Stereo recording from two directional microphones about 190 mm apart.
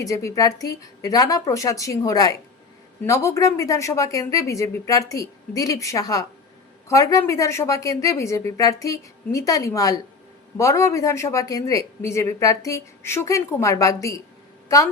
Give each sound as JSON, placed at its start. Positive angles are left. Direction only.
{"t": 0.0, "sound": "a woman's voice", "side_deg": 15}